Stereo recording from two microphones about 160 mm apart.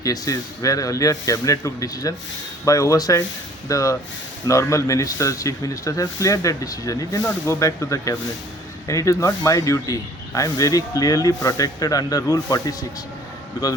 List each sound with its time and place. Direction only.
0.0 s speech: 20° left (ahead or behind)